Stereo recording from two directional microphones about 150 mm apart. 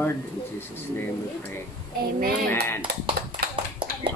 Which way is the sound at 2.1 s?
85° right.